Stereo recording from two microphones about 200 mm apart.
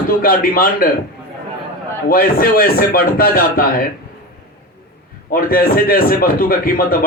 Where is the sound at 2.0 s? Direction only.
45° left (ahead or behind).